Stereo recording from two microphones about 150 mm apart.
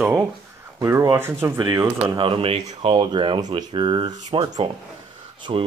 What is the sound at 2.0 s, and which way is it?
Speech, 35° right (ahead or behind).